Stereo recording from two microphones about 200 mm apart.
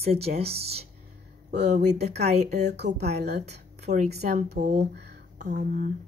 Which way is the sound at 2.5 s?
55° right (ahead or behind).